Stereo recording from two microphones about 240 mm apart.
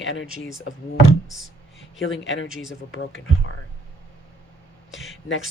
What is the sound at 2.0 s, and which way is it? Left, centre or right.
Speech, left.